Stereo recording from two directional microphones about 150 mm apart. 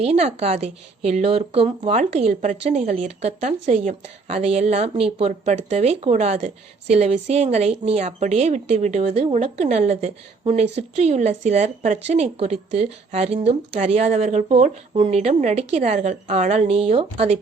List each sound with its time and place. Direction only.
0.0 s speech: 45° right (ahead or behind)